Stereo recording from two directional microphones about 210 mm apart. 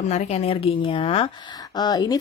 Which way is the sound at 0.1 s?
30° left (ahead or behind).